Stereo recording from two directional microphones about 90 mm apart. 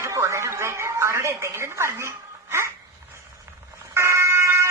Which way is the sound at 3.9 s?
30° right (ahead or behind).